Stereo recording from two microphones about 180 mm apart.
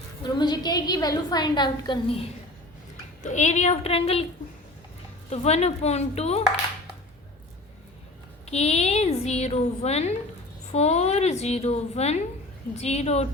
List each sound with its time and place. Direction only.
0.2 s a woman's voice: 25° left (ahead or behind)
3.2 s a woman's voice: 40° left (ahead or behind)
5.3 s a woman's voice: 35° left (ahead or behind)
8.4 s a woman's voice: 35° left (ahead or behind)